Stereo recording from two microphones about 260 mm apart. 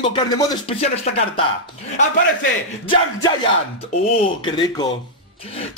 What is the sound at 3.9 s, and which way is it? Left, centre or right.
A man's voice, left.